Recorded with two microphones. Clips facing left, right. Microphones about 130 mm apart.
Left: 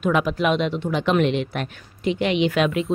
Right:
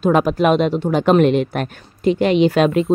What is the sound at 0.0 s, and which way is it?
A woman's voice, 40° right (ahead or behind).